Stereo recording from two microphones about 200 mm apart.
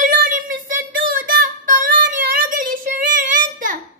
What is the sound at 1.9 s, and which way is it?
Child singing, 45° right (ahead or behind).